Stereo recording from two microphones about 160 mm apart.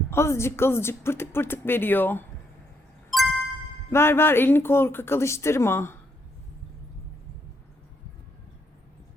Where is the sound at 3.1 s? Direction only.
Centre (ahead or behind).